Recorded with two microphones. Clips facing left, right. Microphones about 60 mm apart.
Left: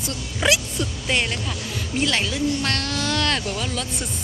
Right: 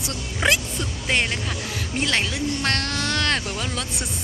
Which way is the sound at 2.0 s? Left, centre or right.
Right.